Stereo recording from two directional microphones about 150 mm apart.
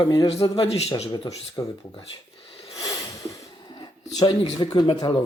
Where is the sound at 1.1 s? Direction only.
25° left (ahead or behind).